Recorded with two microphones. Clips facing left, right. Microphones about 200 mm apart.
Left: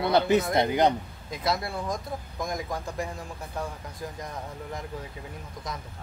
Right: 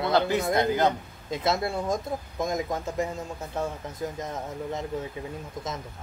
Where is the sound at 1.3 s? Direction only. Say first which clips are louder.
Right 3 dB; 25° right (ahead or behind).